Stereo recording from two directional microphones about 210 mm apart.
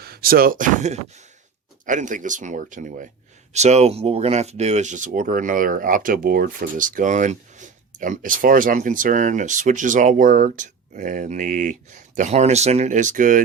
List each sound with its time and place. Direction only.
0.0 s speech: 45° right (ahead or behind)